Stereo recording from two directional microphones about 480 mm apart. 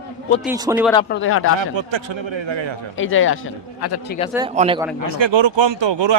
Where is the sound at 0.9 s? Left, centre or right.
Centre.